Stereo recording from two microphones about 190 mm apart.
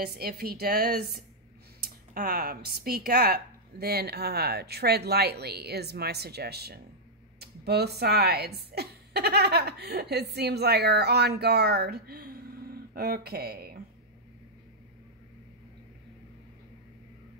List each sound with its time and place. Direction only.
0.0 s speech: 55° right (ahead or behind)